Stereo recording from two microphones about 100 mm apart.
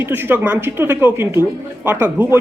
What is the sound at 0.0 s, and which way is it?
Speech, 20° right (ahead or behind).